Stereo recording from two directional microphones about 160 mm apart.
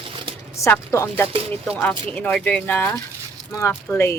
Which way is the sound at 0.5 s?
20° left (ahead or behind).